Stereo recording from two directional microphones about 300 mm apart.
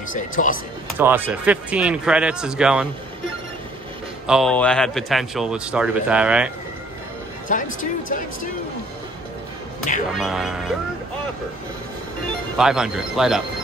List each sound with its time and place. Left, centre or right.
0.1 s speech: left
0.9 s speech: centre
4.3 s speech: centre
7.5 s speech: left
10.1 s speech: centre
12.5 s speech: centre